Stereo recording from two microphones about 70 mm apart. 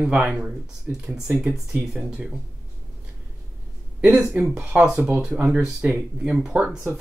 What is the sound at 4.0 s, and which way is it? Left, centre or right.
Speech, centre.